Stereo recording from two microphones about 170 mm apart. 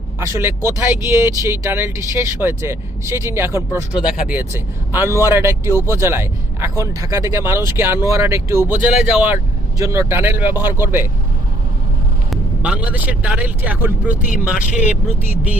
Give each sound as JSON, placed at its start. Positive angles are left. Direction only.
{"t": 0.2, "sound": "speech", "side_deg": -15}
{"t": 12.3, "sound": "speech", "side_deg": -5}